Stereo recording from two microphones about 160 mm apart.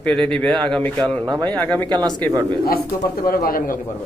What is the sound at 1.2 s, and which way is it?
Speech, 25° right (ahead or behind).